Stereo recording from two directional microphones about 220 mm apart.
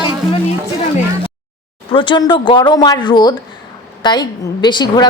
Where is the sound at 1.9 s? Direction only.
20° left (ahead or behind).